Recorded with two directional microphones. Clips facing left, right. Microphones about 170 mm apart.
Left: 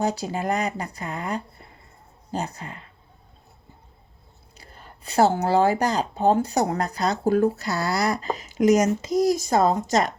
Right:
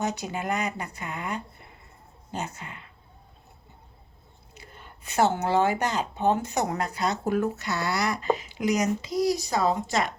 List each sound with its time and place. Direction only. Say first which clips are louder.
0.0 s speech: left 4 dB; 35° left (ahead or behind)
4.5 s speech: left 1 dB; 35° left (ahead or behind)